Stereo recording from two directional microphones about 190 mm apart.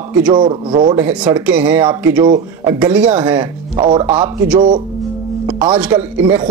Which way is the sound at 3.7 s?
20° right (ahead or behind).